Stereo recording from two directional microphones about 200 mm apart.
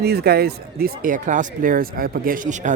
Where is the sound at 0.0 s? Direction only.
50° right (ahead or behind).